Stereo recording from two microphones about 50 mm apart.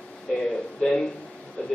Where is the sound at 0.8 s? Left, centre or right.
Centre.